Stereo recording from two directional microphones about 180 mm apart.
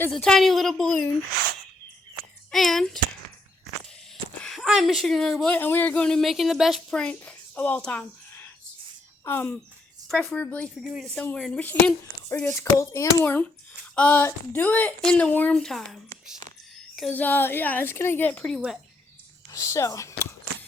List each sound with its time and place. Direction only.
0.1 s a woman's voice: 5° left (ahead or behind)
2.5 s a woman's voice: centre (ahead or behind)
4.4 s speech: centre (ahead or behind)
9.2 s speech: 15° left (ahead or behind)
19.5 s a sound: 20° left (ahead or behind)